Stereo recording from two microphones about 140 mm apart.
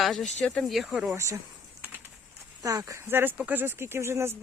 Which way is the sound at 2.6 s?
25° right (ahead or behind).